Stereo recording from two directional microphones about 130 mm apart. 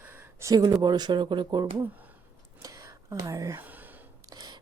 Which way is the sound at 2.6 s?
25° right (ahead or behind).